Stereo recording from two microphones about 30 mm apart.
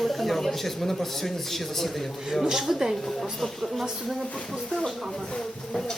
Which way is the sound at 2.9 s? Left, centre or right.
Centre.